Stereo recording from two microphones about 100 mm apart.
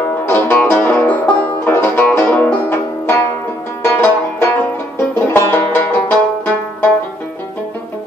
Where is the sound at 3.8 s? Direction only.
20° left (ahead or behind).